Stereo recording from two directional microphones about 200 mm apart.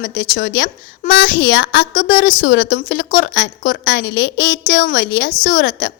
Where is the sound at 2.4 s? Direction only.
60° left (ahead or behind).